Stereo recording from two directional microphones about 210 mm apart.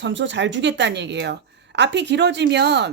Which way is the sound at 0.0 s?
60° right (ahead or behind).